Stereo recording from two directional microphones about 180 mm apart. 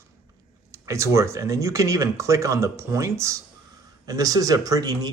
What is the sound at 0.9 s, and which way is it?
Speech, 15° right (ahead or behind).